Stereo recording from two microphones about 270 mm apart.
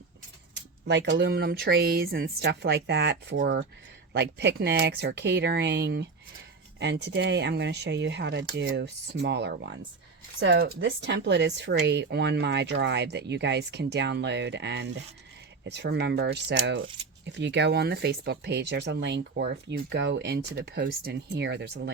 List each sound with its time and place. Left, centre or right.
0.5 s speech: right